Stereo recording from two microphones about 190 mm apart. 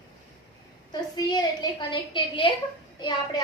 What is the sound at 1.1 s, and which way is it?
A woman's voice, 20° left (ahead or behind).